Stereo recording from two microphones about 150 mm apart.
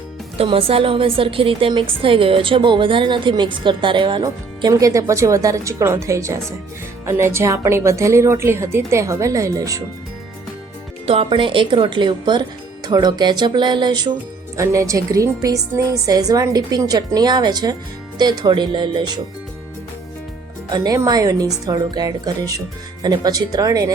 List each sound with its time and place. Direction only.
0.3 s a woman's voice: 40° right (ahead or behind); by 9.8 s 20° right (ahead or behind)
11.0 s a woman's voice: 40° right (ahead or behind)
20.7 s a woman's voice: 25° right (ahead or behind)